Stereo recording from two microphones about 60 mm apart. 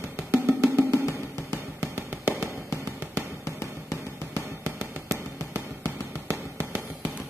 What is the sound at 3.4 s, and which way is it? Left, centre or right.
Music, left.